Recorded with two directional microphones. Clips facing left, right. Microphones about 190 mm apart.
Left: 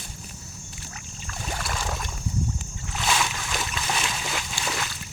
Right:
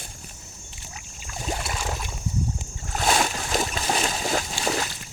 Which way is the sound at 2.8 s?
45° right (ahead or behind).